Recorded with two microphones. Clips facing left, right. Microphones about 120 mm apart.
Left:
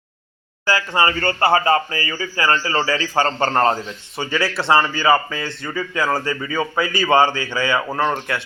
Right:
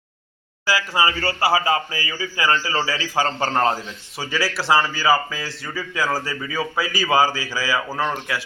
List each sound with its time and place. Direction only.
0.6 s a man's voice: 5° right (ahead or behind)